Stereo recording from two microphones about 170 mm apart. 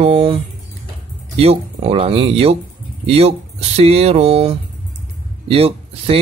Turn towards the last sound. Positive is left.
turn(degrees=-35)  # may be behind; listen again after turning